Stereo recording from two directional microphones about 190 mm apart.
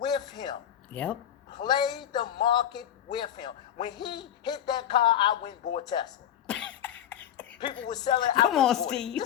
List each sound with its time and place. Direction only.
0.0 s a sound: 25° left (ahead or behind)
1.5 s a man's voice: 20° left (ahead or behind)
6.5 s cough: 5° left (ahead or behind)
7.9 s speech: 20° left (ahead or behind)
8.4 s speech: centre (ahead or behind)